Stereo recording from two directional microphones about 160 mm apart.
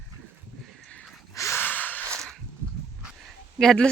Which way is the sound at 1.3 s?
15° left (ahead or behind).